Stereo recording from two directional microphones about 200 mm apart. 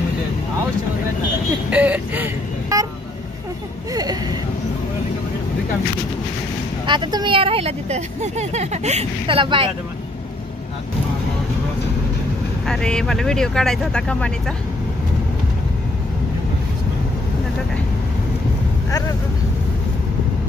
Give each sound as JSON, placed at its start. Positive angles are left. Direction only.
{"t": 1.7, "sound": "speech", "side_deg": -5}
{"t": 3.9, "sound": "speech", "side_deg": -20}
{"t": 6.9, "sound": "speech", "side_deg": -20}
{"t": 12.6, "sound": "speech", "side_deg": 5}
{"t": 18.9, "sound": "speech", "side_deg": 15}